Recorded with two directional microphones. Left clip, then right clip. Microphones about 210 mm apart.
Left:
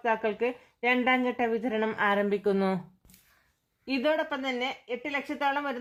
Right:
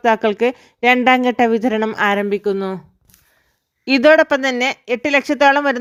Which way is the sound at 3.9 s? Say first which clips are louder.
Right 17 dB; 45° right (ahead or behind).